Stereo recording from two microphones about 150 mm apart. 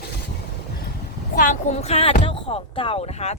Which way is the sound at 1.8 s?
40° left (ahead or behind).